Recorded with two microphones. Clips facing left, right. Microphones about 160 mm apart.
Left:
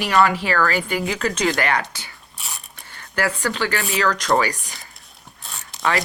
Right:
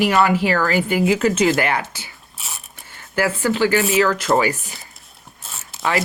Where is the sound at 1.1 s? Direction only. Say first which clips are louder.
Right 5 dB; 25° right (ahead or behind).